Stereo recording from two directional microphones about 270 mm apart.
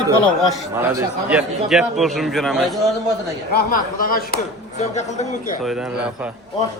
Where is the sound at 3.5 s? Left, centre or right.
Left.